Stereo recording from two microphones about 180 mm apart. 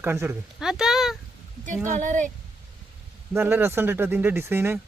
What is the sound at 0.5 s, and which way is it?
Speech, 5° right (ahead or behind).